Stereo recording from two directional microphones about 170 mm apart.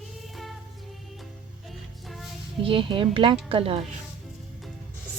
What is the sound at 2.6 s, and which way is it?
Speech, 30° right (ahead or behind).